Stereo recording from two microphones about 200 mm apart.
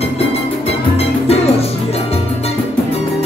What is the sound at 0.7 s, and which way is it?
Music, 30° left (ahead or behind).